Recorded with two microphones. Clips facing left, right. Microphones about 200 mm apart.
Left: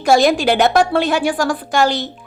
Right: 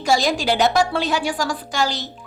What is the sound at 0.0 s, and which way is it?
A woman's voice, 55° left (ahead or behind).